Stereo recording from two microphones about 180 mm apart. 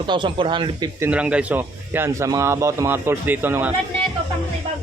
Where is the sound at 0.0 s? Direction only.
25° right (ahead or behind).